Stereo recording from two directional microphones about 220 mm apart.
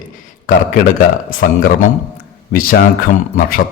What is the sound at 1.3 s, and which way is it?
A man's voice, 40° left (ahead or behind).